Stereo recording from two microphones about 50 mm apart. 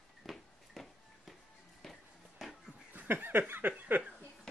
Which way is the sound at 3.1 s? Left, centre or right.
Right.